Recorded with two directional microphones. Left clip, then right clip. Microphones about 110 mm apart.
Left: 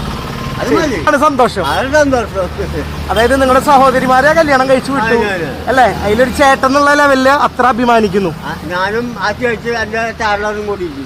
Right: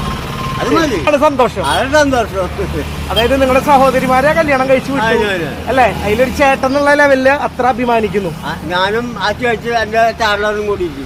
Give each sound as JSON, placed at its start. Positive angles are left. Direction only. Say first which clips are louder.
{"t": 1.0, "sound": "a man's voice", "louder": "left 2 dB", "side_deg": 70}
{"t": 1.6, "sound": "speech", "louder": "even", "side_deg": 0}
{"t": 3.2, "sound": "speech", "louder": "left 2 dB", "side_deg": 50}
{"t": 5.0, "sound": "speech", "louder": "right 1 dB", "side_deg": -5}
{"t": 5.7, "sound": "speech", "louder": "left 2 dB", "side_deg": 45}
{"t": 6.7, "sound": "a man's voice", "louder": "left 1 dB", "side_deg": 70}
{"t": 8.7, "sound": "speech", "louder": "right 1 dB", "side_deg": -10}